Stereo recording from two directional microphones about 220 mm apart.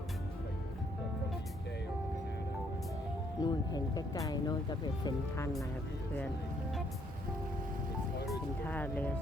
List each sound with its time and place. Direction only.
3.4 s speech: 15° left (ahead or behind)
8.3 s music: 5° left (ahead or behind)